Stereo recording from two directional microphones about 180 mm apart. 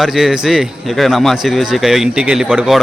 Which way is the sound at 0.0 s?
Centre (ahead or behind).